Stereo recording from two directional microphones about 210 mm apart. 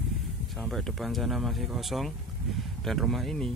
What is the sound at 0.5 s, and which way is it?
Speech, centre (ahead or behind).